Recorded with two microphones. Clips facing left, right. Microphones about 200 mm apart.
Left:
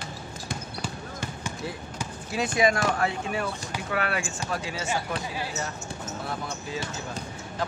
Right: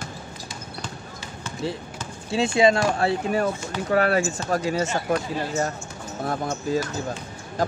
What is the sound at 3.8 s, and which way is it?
Speech, 40° right (ahead or behind).